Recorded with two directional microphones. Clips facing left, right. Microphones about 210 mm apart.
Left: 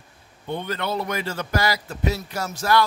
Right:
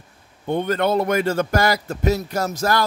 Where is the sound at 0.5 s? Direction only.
50° right (ahead or behind).